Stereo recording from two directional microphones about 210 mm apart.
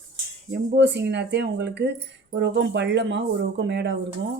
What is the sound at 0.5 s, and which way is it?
Speech, 55° right (ahead or behind).